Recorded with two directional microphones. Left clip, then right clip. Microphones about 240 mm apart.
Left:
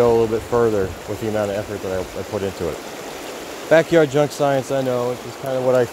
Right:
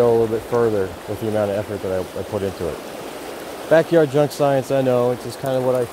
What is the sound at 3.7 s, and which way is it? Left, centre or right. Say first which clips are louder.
Speech: left 1 dB; centre.